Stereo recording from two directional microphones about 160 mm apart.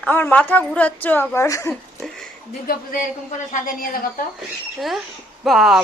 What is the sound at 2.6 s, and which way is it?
Speech, 60° left (ahead or behind).